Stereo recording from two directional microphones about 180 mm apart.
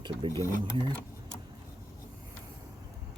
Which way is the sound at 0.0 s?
25° right (ahead or behind).